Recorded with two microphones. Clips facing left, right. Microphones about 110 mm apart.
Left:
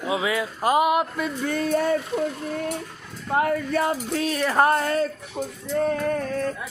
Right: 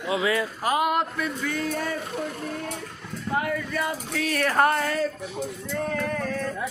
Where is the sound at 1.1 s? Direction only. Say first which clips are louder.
Left 2 dB; 25° left (ahead or behind).